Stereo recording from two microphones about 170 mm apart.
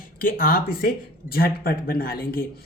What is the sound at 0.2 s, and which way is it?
Speech, 60° left (ahead or behind).